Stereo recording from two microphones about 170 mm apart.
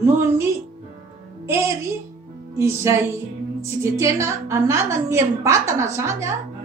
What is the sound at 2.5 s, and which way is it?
A woman's voice, 15° right (ahead or behind).